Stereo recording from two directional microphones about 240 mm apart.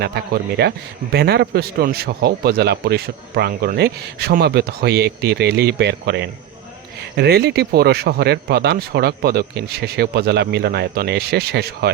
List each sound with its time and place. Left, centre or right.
0.0 s a man's voice: right